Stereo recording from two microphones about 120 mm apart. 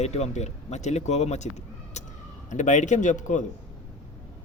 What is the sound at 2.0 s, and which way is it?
Emergency vehicle, 70° left (ahead or behind).